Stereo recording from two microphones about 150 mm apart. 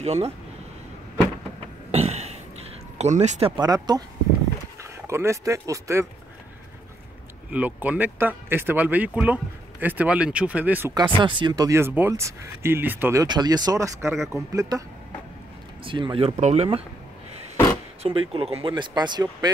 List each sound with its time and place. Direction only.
0.0 s speech: 45° right (ahead or behind)
1.9 s burping: 45° right (ahead or behind)
3.0 s speech: 50° right (ahead or behind)
3.5 s speech: 25° right (ahead or behind)
5.0 s speech: 20° right (ahead or behind)
7.5 s speech: 10° right (ahead or behind)
11.0 s speech: 30° right (ahead or behind)
15.8 s speech: 35° right (ahead or behind)
16.3 s speech: 45° right (ahead or behind)
18.0 s speech: 40° right (ahead or behind)